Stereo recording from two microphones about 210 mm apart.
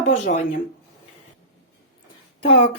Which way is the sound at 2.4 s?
25° left (ahead or behind).